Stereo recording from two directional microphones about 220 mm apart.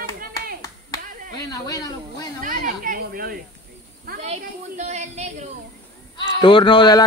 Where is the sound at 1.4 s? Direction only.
15° left (ahead or behind).